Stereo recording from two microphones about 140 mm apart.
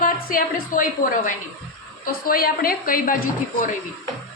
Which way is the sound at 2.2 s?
90° left.